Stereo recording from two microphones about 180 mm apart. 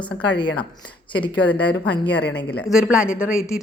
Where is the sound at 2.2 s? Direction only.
60° left (ahead or behind).